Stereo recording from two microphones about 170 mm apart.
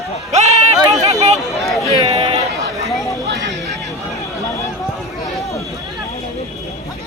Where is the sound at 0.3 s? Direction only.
40° right (ahead or behind).